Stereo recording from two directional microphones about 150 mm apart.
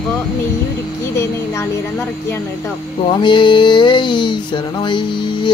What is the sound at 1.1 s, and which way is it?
Speech, 15° left (ahead or behind).